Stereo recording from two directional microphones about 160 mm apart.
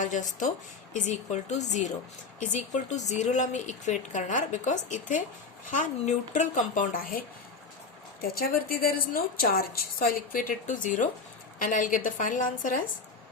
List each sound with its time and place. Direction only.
0.0 s a woman's voice: 50° left (ahead or behind)